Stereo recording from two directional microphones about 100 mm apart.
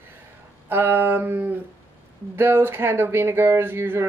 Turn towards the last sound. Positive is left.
turn(degrees=-25)  # may be behind; listen again after turning